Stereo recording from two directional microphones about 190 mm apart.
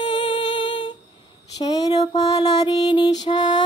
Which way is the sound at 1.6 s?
20° left (ahead or behind).